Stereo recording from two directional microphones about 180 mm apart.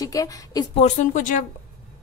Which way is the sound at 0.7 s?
40° left (ahead or behind).